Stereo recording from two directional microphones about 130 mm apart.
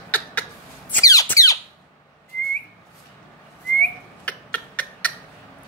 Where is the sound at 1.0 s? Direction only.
25° left (ahead or behind).